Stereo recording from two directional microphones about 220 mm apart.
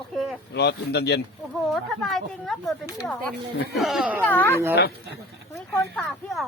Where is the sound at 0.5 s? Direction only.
50° left (ahead or behind).